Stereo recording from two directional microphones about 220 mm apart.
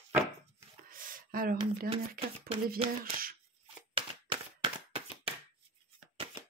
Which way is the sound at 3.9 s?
25° right (ahead or behind).